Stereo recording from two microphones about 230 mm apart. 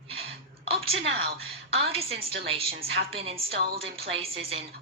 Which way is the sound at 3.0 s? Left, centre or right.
Right.